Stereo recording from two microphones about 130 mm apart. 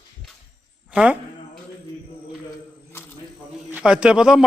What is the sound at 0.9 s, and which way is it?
Speech, 10° right (ahead or behind).